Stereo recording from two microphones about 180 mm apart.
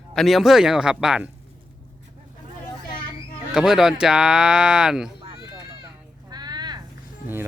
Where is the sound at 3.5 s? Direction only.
5° right (ahead or behind).